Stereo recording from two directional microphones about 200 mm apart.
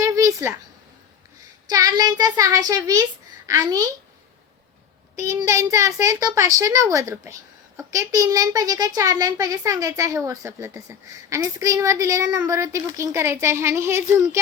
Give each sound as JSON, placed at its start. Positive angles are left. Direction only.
{"t": 0.0, "sound": "a sound", "side_deg": -15}
{"t": 1.7, "sound": "child singing", "side_deg": -20}
{"t": 3.4, "sound": "a child's voice", "side_deg": -15}
{"t": 5.2, "sound": "a child's voice", "side_deg": -15}